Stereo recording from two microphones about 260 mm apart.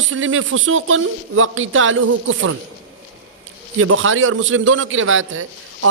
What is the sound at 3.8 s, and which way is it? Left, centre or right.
A man's voice, right.